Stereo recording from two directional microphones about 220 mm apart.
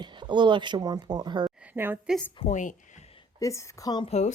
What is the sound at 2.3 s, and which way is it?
Speech, 30° left (ahead or behind).